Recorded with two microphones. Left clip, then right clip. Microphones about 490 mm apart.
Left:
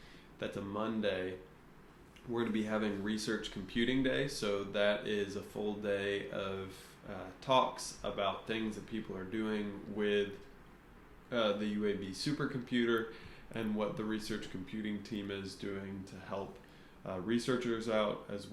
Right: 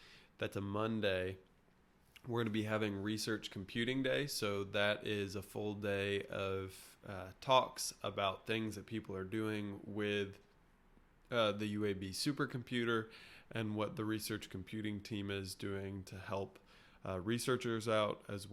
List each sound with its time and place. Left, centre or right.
0.3 s speech: right
11.3 s speech: right